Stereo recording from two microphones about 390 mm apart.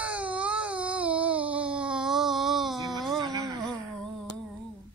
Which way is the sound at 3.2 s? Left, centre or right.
Centre.